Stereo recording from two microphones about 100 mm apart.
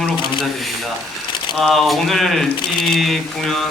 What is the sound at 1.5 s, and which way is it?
Speech, centre (ahead or behind).